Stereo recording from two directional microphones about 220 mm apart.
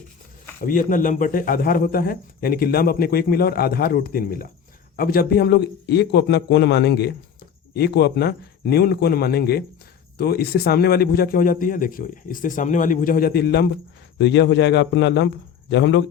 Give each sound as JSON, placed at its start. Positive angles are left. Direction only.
{"t": 0.6, "sound": "a man's voice", "side_deg": 40}